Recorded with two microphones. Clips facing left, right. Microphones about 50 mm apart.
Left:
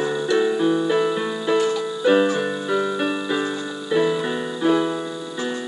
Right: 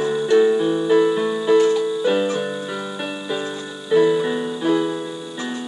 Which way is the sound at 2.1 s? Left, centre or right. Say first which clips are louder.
Left 7 dB; centre.